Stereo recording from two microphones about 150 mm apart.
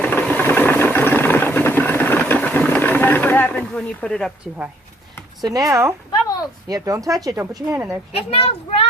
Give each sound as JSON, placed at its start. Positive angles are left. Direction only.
{"t": 0.0, "sound": "engine", "side_deg": 10}
{"t": 5.4, "sound": "speech", "side_deg": -25}
{"t": 8.1, "sound": "a child's voice", "side_deg": 40}